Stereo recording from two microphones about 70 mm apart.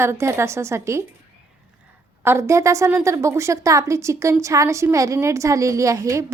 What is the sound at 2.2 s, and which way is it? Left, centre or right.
A woman's voice, right.